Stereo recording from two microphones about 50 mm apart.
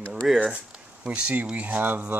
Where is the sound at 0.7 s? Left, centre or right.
Right.